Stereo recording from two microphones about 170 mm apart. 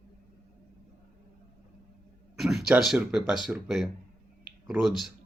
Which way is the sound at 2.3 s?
Centre (ahead or behind).